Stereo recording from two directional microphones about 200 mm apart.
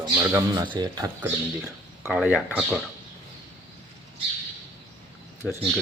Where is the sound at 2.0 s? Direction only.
Centre (ahead or behind).